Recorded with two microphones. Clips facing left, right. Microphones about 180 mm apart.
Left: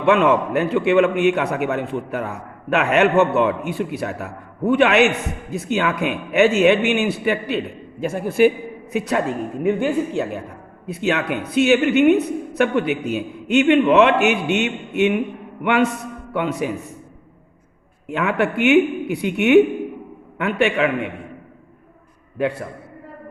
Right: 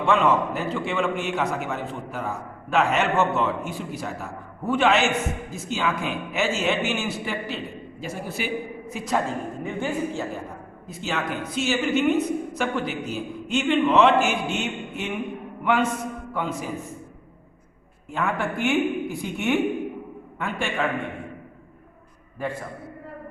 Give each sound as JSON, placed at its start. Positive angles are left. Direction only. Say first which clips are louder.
{"t": 0.0, "sound": "a man's voice", "louder": "left 5 dB", "side_deg": 60}
{"t": 18.1, "sound": "speech", "louder": "left 6 dB", "side_deg": 65}